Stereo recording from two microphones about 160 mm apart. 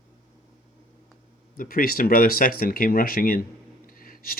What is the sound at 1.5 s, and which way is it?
Speech, 60° left (ahead or behind).